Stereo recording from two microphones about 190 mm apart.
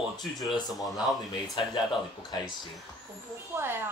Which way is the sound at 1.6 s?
25° left (ahead or behind).